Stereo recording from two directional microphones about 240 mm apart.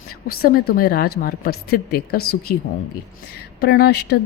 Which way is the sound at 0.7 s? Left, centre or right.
Left.